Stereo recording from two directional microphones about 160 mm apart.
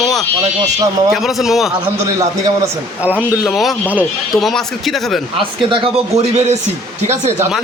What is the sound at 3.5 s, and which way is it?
Speech, centre (ahead or behind).